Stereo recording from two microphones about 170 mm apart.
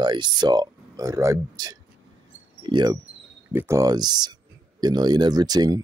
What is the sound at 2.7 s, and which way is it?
Wind chime, 25° right (ahead or behind).